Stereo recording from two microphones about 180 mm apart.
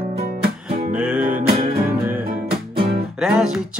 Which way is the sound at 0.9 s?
10° right (ahead or behind).